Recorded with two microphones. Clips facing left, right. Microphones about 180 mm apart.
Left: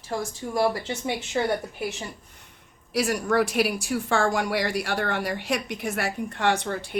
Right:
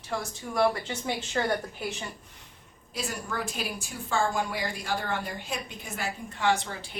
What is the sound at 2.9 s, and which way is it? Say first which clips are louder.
Speech: left 11 dB; 75° left (ahead or behind).